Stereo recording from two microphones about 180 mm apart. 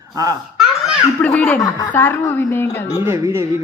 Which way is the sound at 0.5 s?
5° right (ahead or behind).